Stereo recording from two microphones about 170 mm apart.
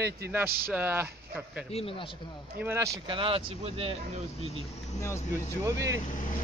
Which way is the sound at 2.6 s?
10° right (ahead or behind).